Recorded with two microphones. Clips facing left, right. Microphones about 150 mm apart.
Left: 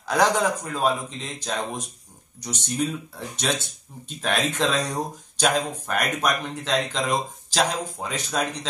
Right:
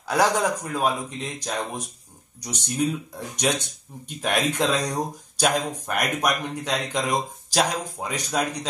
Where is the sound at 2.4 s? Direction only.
10° right (ahead or behind).